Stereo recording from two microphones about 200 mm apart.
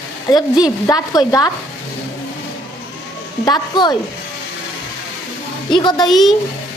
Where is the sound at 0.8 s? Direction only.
20° left (ahead or behind).